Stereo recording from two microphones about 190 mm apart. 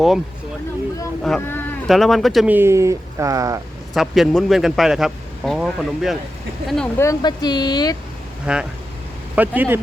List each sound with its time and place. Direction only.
1.2 s speech: 5° left (ahead or behind); by 3.6 s 15° right (ahead or behind)
3.9 s a man's voice: centre (ahead or behind)
7.0 s speech: 20° left (ahead or behind)
8.5 s a man's voice: 5° right (ahead or behind)